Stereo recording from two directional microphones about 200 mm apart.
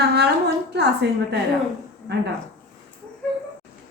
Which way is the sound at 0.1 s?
55° right (ahead or behind).